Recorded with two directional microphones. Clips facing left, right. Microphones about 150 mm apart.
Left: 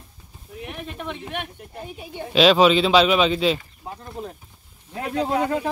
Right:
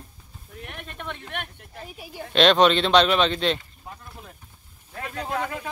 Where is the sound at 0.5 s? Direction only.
5° left (ahead or behind).